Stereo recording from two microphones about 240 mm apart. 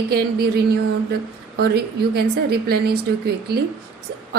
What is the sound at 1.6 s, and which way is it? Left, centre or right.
A woman's voice, right.